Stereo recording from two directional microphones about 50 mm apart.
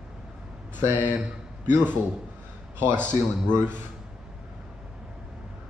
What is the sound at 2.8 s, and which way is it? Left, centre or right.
Speech, left.